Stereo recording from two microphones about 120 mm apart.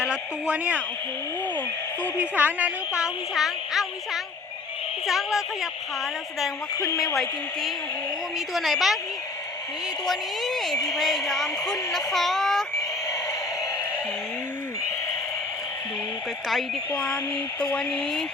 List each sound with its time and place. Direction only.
0.0 s speech: 10° right (ahead or behind)
2.1 s a woman's voice: 15° right (ahead or behind)
6.7 s a woman's voice: 30° left (ahead or behind)
8.5 s a woman's voice: centre (ahead or behind)
10.1 s a woman's voice: centre (ahead or behind)
16.9 s speech: 10° left (ahead or behind)